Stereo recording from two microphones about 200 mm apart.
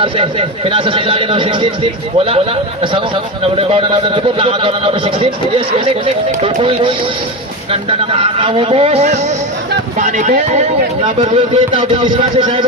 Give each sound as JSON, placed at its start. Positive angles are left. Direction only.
{"t": 0.0, "sound": "speech", "side_deg": -25}